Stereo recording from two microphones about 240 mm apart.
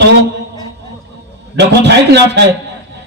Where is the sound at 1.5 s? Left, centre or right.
Right.